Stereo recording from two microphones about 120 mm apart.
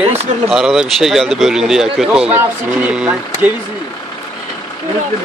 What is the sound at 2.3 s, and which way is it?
Speech, 15° right (ahead or behind).